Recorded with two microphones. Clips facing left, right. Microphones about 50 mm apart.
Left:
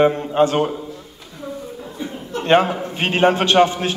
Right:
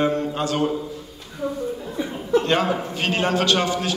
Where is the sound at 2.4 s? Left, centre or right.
Left.